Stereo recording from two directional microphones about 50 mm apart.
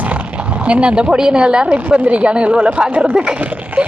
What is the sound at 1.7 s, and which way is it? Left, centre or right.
A woman's voice, right.